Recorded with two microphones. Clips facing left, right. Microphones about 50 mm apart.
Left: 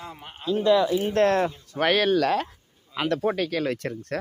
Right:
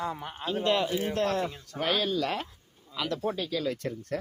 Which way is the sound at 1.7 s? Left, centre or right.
Left.